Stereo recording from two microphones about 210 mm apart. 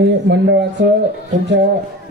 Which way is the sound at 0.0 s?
55° right (ahead or behind).